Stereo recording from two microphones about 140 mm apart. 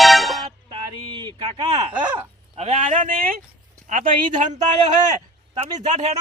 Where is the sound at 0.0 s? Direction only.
Centre (ahead or behind).